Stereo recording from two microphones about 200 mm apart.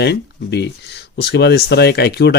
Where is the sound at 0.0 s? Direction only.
55° left (ahead or behind).